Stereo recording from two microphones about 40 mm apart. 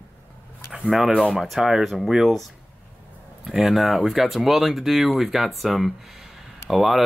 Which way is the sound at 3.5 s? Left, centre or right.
Centre.